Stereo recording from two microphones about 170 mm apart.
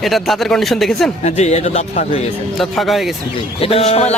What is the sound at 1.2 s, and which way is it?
Speech, 40° left (ahead or behind).